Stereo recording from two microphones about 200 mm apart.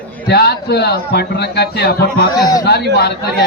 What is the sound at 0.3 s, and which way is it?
A man's voice, 55° left (ahead or behind).